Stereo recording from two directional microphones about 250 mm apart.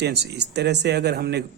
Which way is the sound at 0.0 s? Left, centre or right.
Right.